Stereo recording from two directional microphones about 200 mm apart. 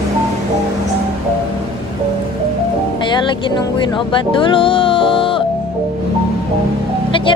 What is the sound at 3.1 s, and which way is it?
Speech, 25° left (ahead or behind).